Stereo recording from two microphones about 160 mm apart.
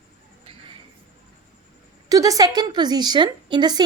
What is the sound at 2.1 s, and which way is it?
A woman's voice, 20° right (ahead or behind).